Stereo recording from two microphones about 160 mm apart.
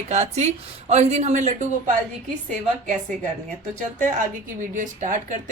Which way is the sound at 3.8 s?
50° right (ahead or behind).